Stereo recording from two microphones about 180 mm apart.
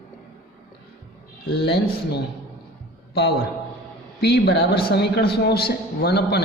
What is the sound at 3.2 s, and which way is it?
A man's voice, 65° left (ahead or behind).